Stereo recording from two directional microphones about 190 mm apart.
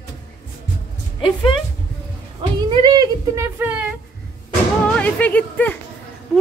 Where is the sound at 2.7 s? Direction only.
25° right (ahead or behind).